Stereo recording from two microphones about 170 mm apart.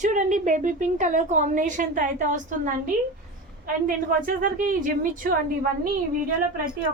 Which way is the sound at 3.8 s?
55° right (ahead or behind).